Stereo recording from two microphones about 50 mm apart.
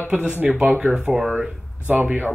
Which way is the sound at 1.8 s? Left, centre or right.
Right.